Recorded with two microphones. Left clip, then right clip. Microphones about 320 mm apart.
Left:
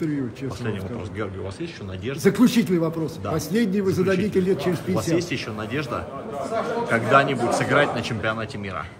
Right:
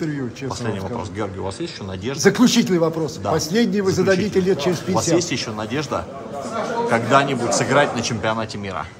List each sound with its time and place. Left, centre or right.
1.2 s speech: centre
6.9 s speech: centre